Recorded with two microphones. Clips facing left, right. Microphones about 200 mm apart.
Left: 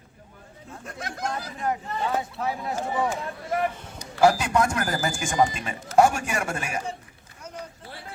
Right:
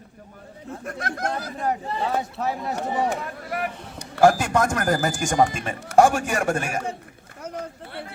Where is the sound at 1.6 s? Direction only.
35° right (ahead or behind).